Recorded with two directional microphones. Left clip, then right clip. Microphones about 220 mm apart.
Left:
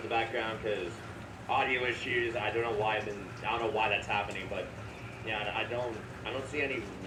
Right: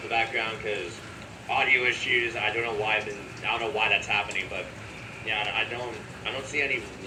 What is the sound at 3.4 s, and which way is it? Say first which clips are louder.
Speech: right 4 dB; 30° left (ahead or behind).